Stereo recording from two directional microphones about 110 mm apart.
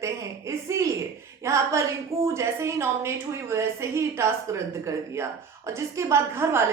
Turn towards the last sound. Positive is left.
turn(degrees=-25)  # may be behind; listen again after turning